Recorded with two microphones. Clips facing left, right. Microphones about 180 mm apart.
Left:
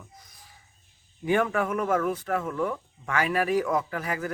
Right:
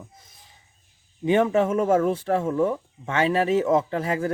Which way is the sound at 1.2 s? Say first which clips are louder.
Right 5 dB; 20° right (ahead or behind).